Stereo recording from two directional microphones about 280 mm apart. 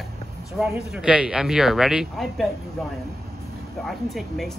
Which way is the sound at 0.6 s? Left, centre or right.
Centre.